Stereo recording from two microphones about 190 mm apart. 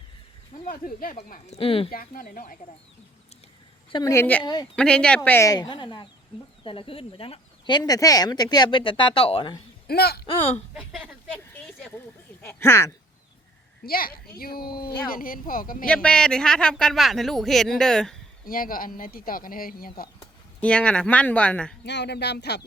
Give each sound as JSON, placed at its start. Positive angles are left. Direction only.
{"t": 0.6, "sound": "speech", "side_deg": 45}
{"t": 1.9, "sound": "speech", "side_deg": 45}
{"t": 3.9, "sound": "speech", "side_deg": 15}
{"t": 9.8, "sound": "speech", "side_deg": 55}
{"t": 10.2, "sound": "speech", "side_deg": 30}
{"t": 10.8, "sound": "a man's voice", "side_deg": -5}
{"t": 11.5, "sound": "speech", "side_deg": 10}
{"t": 13.8, "sound": "speech", "side_deg": 50}
{"t": 15.9, "sound": "a man's voice", "side_deg": 5}
{"t": 18.4, "sound": "speech", "side_deg": 50}
{"t": 20.6, "sound": "speech", "side_deg": 5}
{"t": 21.8, "sound": "speech", "side_deg": 65}